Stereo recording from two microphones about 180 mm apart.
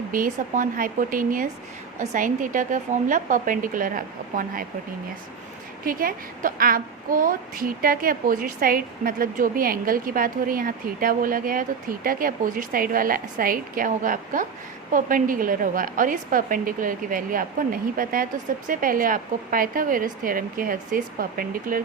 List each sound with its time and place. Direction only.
0.1 s a woman's voice: 50° right (ahead or behind)
5.8 s a woman's voice: 50° right (ahead or behind)